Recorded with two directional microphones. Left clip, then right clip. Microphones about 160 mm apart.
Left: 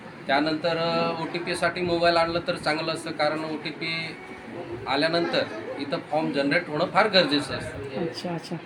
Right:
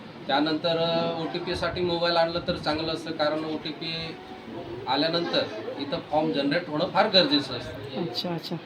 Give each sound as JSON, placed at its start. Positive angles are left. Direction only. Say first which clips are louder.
{"t": 0.3, "sound": "a man's voice", "louder": "left 1 dB", "side_deg": 15}
{"t": 4.9, "sound": "a man's voice", "louder": "left 1 dB", "side_deg": 20}